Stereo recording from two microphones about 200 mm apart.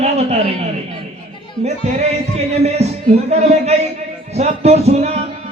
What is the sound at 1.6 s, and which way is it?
Music, 35° right (ahead or behind).